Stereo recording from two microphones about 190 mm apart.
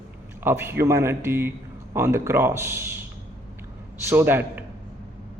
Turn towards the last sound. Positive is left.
turn(degrees=-10)  # may be behind; listen again after turning